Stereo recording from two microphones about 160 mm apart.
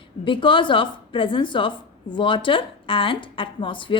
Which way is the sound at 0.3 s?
30° left (ahead or behind).